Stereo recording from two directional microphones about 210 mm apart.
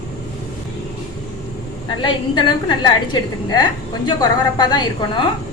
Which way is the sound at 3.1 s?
20° left (ahead or behind).